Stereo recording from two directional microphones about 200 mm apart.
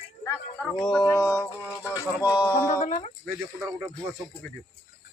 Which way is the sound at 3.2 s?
Centre (ahead or behind).